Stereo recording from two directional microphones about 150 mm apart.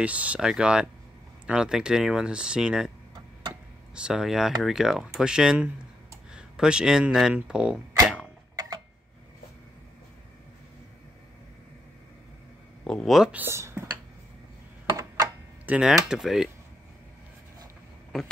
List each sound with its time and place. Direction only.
0.0 s speech: 10° right (ahead or behind)
3.9 s speech: 5° right (ahead or behind)
8.5 s tick-tock: 25° right (ahead or behind)
12.8 s speech: 5° left (ahead or behind); by 13.8 s 15° right (ahead or behind)
14.9 s a sound: 25° right (ahead or behind)
15.6 s speech: 5° right (ahead or behind)